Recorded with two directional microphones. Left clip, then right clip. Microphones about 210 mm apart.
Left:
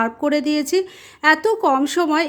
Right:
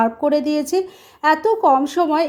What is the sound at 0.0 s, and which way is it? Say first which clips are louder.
Speech: right 2 dB; 15° left (ahead or behind).